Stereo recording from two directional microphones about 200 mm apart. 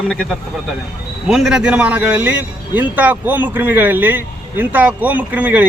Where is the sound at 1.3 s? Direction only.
5° right (ahead or behind).